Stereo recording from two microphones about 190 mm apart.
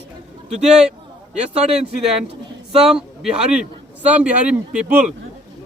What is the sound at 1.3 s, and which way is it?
Speech, 35° right (ahead or behind).